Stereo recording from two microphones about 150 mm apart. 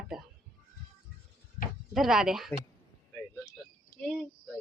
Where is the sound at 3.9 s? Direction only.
20° left (ahead or behind).